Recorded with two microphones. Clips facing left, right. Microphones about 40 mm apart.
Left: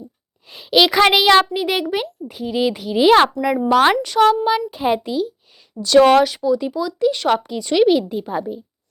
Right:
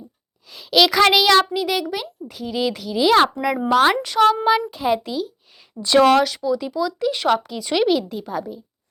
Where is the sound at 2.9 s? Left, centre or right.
Left.